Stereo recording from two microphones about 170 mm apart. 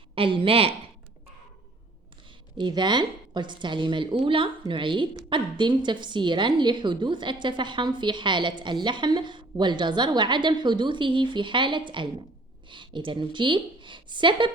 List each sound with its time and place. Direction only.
0.1 s a woman's voice: 30° right (ahead or behind)
2.6 s a woman's voice: 25° right (ahead or behind)